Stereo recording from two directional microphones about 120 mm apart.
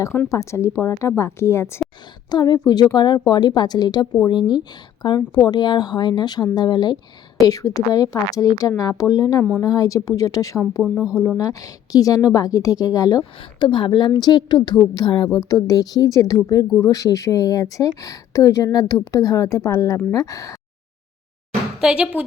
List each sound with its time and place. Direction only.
0.3 s speech: 25° left (ahead or behind)
2.3 s a woman's voice: 35° left (ahead or behind)
10.8 s speech: 5° left (ahead or behind)
11.3 s a woman's voice: 30° left (ahead or behind)
13.4 s a woman's voice: 45° left (ahead or behind); by 20.6 s 25° left (ahead or behind)
21.8 s speech: 5° right (ahead or behind)